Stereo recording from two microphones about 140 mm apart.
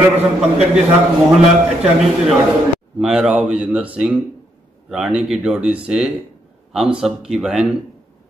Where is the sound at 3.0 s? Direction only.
5° right (ahead or behind).